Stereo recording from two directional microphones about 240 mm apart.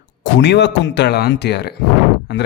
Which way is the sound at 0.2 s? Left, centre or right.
Left.